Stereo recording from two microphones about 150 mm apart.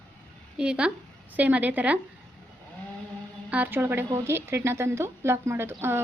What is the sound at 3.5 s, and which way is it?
Speech, 10° right (ahead or behind).